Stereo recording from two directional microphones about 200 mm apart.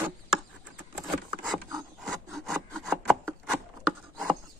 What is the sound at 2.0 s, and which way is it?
Rub, centre (ahead or behind).